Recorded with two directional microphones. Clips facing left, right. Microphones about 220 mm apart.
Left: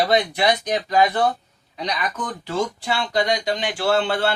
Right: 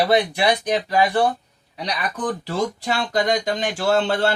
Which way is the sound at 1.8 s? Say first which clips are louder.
Right 2 dB; 35° right (ahead or behind).